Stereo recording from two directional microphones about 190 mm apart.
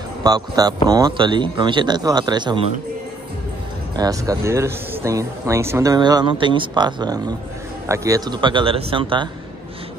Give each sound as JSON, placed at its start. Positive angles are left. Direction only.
{"t": 0.2, "sound": "speech", "side_deg": -20}
{"t": 3.9, "sound": "speech", "side_deg": -20}